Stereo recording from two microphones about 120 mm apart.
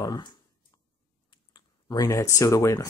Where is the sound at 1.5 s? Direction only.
35° left (ahead or behind).